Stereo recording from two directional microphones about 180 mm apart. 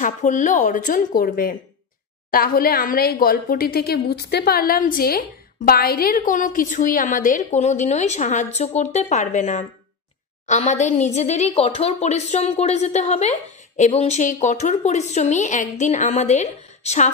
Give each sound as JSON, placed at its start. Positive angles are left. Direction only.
{"t": 0.0, "sound": "a woman's voice", "side_deg": 45}